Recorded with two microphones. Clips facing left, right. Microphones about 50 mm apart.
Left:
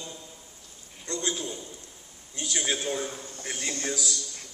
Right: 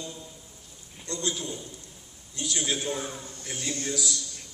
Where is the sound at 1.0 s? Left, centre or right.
Left.